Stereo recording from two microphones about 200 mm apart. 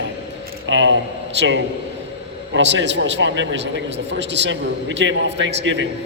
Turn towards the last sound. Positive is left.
turn(degrees=-60)  # may be behind; listen again after turning